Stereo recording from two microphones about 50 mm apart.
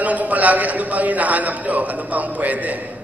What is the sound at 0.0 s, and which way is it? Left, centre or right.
A man's voice, right.